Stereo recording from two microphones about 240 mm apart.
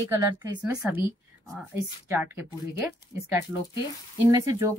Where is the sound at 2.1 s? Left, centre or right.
Centre.